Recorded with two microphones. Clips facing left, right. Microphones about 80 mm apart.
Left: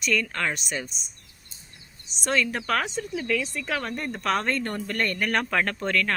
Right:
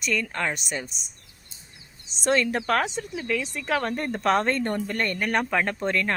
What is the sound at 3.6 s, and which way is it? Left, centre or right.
Speech, right.